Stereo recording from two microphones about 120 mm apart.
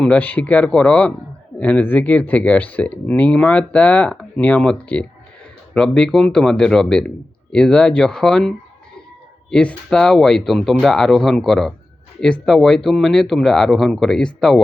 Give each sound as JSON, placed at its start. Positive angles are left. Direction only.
{"t": 0.0, "sound": "speech", "side_deg": 10}